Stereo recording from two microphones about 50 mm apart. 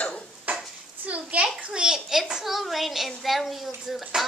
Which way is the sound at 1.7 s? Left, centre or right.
Centre.